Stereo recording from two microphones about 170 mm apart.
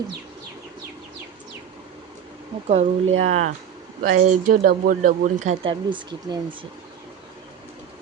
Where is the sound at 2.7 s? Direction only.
40° right (ahead or behind).